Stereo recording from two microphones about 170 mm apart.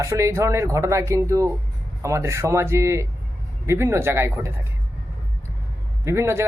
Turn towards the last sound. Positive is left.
turn(degrees=-15)  # may be behind; listen again after turning